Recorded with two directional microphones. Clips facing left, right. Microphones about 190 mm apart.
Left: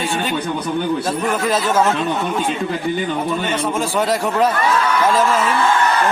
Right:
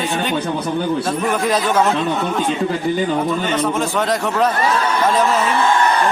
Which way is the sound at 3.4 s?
10° left (ahead or behind).